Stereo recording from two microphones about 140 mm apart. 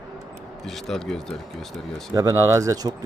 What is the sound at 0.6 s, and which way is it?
Speech, centre (ahead or behind).